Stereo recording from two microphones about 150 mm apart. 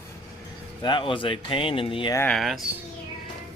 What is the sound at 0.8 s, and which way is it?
Speech, 30° left (ahead or behind).